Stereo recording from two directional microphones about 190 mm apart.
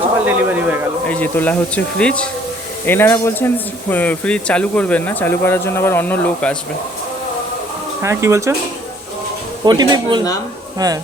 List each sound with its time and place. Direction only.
0.3 s a man's voice: 10° right (ahead or behind)
1.0 s speech: 5° left (ahead or behind)
8.0 s speech: 15° right (ahead or behind)
9.6 s speech: 20° right (ahead or behind)